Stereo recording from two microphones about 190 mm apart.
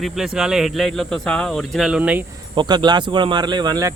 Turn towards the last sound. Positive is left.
turn(degrees=-20)  # may be behind; listen again after turning